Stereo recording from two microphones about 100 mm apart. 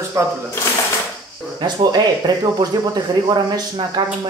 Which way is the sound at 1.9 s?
40° right (ahead or behind).